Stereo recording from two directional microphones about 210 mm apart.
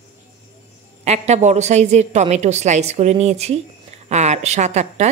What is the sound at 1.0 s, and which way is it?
A woman's voice, 30° right (ahead or behind).